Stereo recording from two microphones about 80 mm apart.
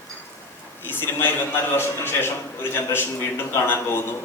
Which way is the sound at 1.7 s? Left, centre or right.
Left.